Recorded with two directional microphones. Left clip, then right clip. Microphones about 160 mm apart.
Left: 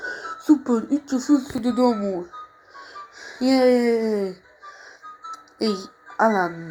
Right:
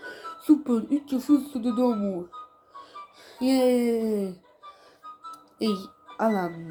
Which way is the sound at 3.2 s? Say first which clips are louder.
Left 5 dB; 35° right (ahead or behind).